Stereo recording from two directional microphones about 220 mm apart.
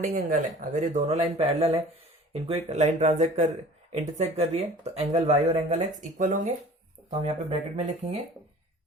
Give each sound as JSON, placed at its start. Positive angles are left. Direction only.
{"t": 0.1, "sound": "speech", "side_deg": -35}